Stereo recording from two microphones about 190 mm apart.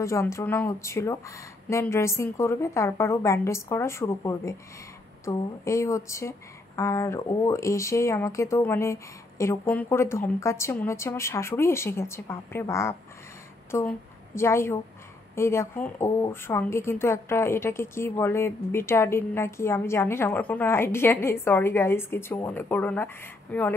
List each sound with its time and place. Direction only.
0.0 s a woman's voice: 15° left (ahead or behind)